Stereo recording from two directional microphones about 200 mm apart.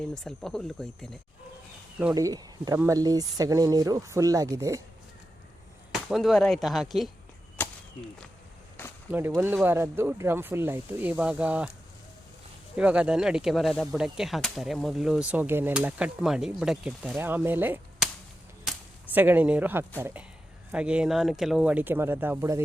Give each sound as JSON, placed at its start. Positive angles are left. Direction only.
{"t": 0.1, "sound": "speech", "side_deg": 5}
{"t": 2.1, "sound": "speech", "side_deg": -20}
{"t": 5.9, "sound": "speech", "side_deg": 0}
{"t": 7.6, "sound": "whip", "side_deg": 10}
{"t": 9.1, "sound": "speech", "side_deg": -10}
{"t": 12.7, "sound": "speech", "side_deg": -5}
{"t": 19.1, "sound": "speech", "side_deg": -10}